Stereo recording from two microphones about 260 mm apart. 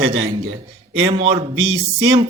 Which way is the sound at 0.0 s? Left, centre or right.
Right.